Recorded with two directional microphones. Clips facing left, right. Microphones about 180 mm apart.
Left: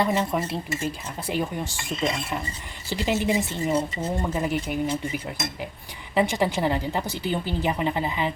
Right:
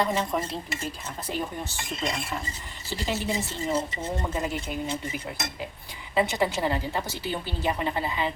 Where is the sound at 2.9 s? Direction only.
15° left (ahead or behind).